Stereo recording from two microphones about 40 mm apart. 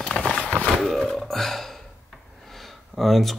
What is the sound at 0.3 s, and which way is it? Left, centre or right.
Run, left.